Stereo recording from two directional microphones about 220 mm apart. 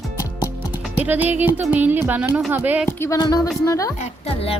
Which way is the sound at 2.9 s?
10° left (ahead or behind).